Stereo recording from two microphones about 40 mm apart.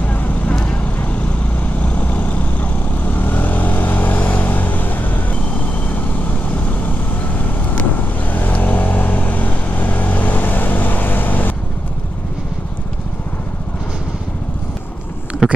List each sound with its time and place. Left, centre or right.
0.0 s vehicle: left